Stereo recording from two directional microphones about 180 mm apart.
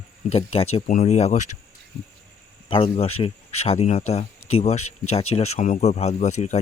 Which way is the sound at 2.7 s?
30° left (ahead or behind).